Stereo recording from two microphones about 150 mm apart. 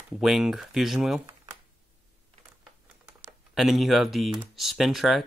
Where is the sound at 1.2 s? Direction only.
25° right (ahead or behind).